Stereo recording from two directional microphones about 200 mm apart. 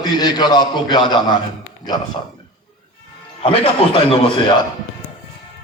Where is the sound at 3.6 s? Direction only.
25° left (ahead or behind).